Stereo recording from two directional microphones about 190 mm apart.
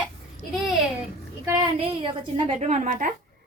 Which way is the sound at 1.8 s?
30° right (ahead or behind).